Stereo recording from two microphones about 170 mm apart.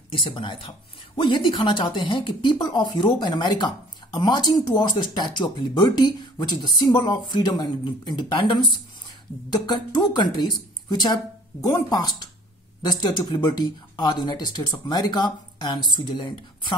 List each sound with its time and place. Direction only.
0.1 s speech: 30° left (ahead or behind)